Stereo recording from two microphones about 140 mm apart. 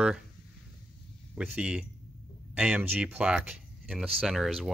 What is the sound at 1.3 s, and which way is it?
Speech, 5° right (ahead or behind).